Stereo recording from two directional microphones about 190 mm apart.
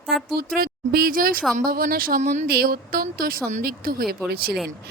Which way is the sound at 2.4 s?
55° right (ahead or behind).